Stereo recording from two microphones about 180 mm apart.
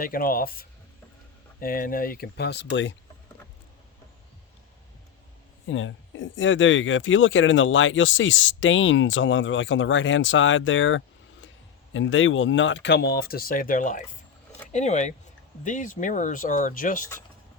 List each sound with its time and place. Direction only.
0.0 s speech: 50° left (ahead or behind); by 2.9 s 80° left
5.6 s speech: 90° left; by 17.1 s 50° left (ahead or behind)